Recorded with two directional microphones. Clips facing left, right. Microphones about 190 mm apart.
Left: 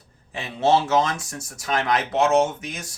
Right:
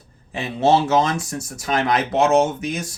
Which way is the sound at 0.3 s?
10° right (ahead or behind).